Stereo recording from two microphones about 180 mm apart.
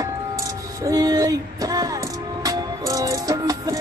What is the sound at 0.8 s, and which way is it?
Music, 20° right (ahead or behind).